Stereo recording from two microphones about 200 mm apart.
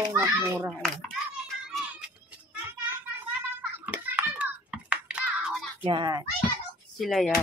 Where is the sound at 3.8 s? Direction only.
5° right (ahead or behind).